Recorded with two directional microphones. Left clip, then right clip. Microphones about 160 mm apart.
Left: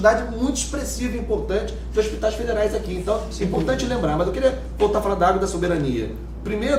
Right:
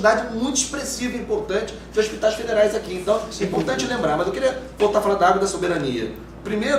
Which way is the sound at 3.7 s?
40° right (ahead or behind).